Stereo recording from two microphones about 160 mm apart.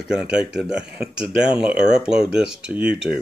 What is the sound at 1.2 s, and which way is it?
Speech, 35° left (ahead or behind).